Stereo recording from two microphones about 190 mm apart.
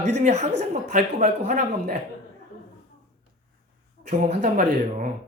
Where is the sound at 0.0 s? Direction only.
35° right (ahead or behind).